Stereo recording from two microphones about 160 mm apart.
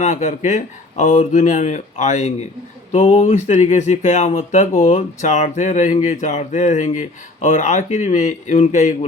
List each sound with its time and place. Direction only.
0.0 s speech: 45° left (ahead or behind)